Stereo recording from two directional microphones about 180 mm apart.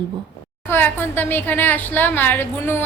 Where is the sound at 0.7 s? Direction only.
10° left (ahead or behind).